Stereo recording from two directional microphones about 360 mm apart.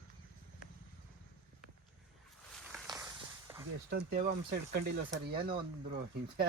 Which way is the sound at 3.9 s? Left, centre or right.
Right.